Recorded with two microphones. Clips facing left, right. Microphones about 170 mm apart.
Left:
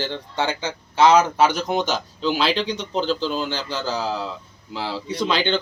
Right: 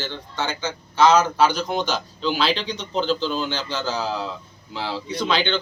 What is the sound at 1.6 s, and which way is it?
Speech, 15° left (ahead or behind).